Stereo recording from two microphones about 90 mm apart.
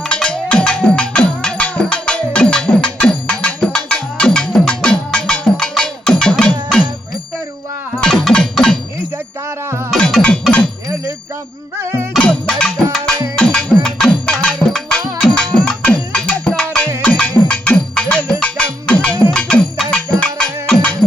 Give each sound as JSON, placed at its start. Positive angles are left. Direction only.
{"t": 0.0, "sound": "cowbell", "side_deg": 10}
{"t": 8.0, "sound": "music", "side_deg": 5}
{"t": 9.9, "sound": "music", "side_deg": 5}
{"t": 11.8, "sound": "music", "side_deg": -30}
{"t": 12.2, "sound": "music", "side_deg": 10}